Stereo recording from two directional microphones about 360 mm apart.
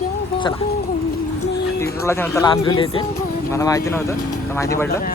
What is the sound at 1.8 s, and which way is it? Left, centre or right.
Speech, centre.